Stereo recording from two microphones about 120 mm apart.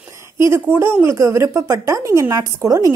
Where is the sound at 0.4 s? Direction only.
20° right (ahead or behind).